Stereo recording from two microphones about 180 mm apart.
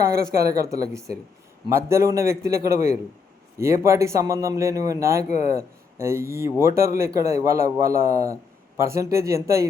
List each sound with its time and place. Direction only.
0.0 s a man's voice: 15° right (ahead or behind)